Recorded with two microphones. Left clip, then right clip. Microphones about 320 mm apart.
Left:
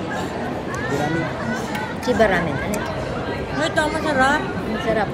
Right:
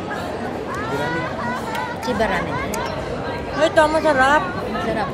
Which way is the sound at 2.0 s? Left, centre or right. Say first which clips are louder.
Left 4 dB; left.